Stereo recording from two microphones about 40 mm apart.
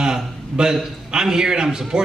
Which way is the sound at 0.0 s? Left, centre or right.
Centre.